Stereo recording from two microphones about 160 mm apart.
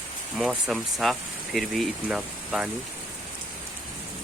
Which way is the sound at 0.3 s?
Centre (ahead or behind).